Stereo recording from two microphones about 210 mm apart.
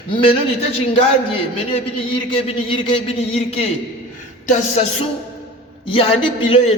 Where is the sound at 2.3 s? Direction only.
25° left (ahead or behind).